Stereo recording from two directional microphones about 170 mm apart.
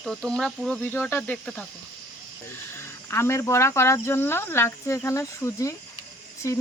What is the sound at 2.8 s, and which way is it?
Speech, 15° left (ahead or behind).